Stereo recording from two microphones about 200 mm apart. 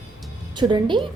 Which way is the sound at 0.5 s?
20° right (ahead or behind).